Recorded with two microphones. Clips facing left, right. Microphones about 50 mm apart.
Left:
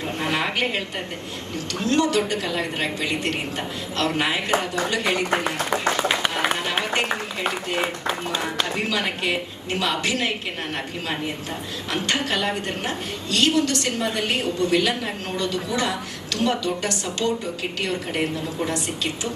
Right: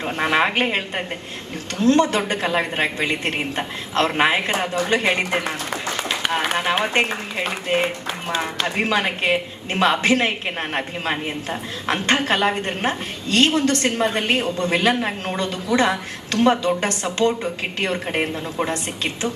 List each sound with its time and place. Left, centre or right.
0.0 s a woman's voice: right
6.7 s a woman's voice: right
8.8 s a woman's voice: right